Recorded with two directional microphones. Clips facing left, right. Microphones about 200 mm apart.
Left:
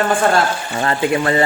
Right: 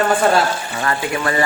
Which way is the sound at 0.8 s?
25° left (ahead or behind).